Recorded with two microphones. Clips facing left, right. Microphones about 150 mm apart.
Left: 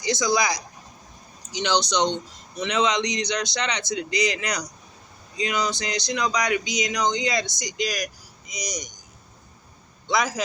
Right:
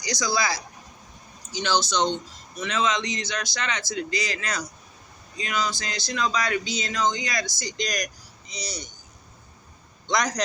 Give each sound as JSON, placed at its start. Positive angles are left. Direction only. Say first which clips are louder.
{"t": 0.0, "sound": "speech", "louder": "left 4 dB", "side_deg": 20}
{"t": 7.7, "sound": "speech", "louder": "left 3 dB", "side_deg": 5}
{"t": 10.1, "sound": "speech", "louder": "left 1 dB", "side_deg": 5}